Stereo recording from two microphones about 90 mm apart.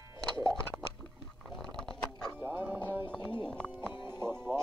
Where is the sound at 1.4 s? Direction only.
5° left (ahead or behind).